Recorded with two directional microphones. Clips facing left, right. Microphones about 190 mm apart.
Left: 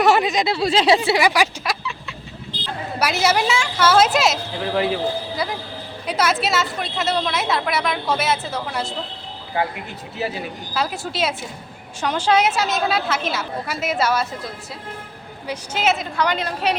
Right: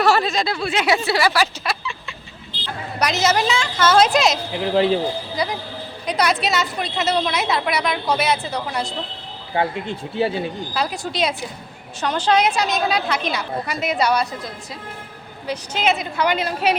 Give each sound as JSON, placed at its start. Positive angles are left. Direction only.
{"t": 0.0, "sound": "a sound", "side_deg": 15}
{"t": 0.6, "sound": "speech", "side_deg": 30}
{"t": 0.9, "sound": "a woman's voice", "side_deg": 20}
{"t": 1.6, "sound": "a sound", "side_deg": 5}
{"t": 3.0, "sound": "a woman's voice", "side_deg": 10}
{"t": 4.5, "sound": "speech", "side_deg": -25}
{"t": 5.4, "sound": "a woman's voice", "side_deg": 5}
{"t": 9.6, "sound": "speech", "side_deg": -25}
{"t": 10.8, "sound": "a woman's voice", "side_deg": 5}